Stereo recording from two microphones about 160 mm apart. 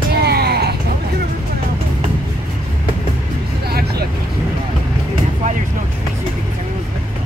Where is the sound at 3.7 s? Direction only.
75° right (ahead or behind).